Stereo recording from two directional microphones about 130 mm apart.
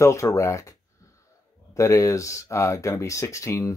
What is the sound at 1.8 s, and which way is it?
Speech, 25° left (ahead or behind).